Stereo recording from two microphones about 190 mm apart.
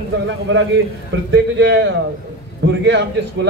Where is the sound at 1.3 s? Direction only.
70° right (ahead or behind).